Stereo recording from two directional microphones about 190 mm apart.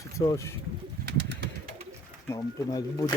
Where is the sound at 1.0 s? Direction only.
55° right (ahead or behind).